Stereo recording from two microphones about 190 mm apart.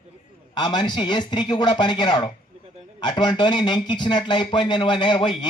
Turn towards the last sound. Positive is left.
turn(degrees=25)  # may be behind; listen again after turning